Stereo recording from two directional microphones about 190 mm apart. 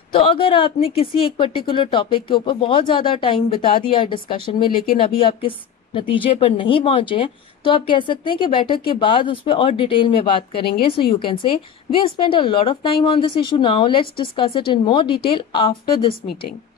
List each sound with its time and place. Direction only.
0.1 s a woman's voice: 25° left (ahead or behind)